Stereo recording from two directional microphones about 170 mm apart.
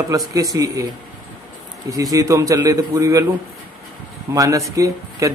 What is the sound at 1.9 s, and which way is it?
Speech, 20° right (ahead or behind).